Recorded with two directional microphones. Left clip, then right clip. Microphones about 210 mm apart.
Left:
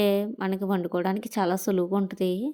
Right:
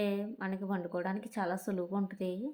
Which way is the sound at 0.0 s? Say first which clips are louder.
Left 11 dB; 45° left (ahead or behind).